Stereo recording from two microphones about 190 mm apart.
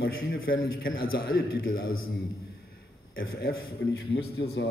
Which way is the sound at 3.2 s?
55° left (ahead or behind).